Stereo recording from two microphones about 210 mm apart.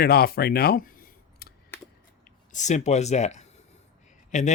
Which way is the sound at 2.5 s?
35° left (ahead or behind).